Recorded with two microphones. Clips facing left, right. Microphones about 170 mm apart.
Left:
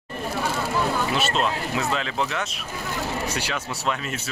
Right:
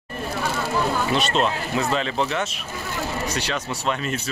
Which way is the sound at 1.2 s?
5° left (ahead or behind).